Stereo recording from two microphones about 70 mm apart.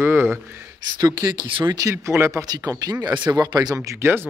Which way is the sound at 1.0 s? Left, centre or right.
Right.